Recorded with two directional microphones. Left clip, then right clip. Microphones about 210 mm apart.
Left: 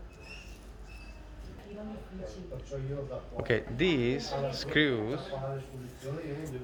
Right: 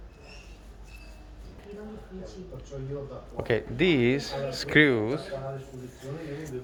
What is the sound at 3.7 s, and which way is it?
A man's voice, 30° right (ahead or behind).